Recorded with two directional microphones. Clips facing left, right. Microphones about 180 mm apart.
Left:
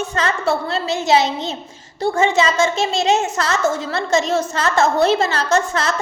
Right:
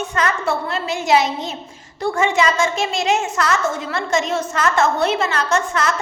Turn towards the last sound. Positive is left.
turn(degrees=30)  # may be behind; listen again after turning